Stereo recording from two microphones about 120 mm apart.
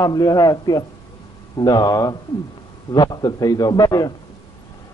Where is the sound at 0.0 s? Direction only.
30° left (ahead or behind).